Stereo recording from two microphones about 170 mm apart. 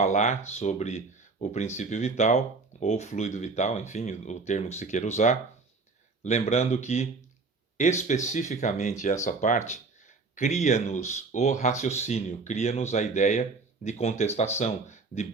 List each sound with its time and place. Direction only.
0.0 s speech: 45° left (ahead or behind)